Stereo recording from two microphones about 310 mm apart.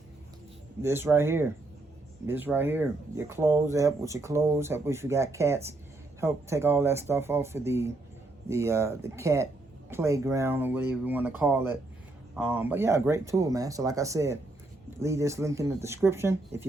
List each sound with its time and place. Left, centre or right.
0.8 s speech: centre